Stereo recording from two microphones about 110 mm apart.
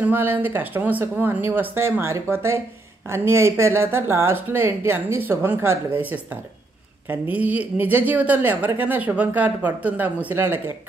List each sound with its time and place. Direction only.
0.0 s a woman's voice: 20° right (ahead or behind)